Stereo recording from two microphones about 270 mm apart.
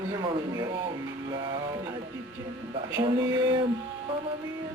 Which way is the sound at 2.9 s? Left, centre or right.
Centre.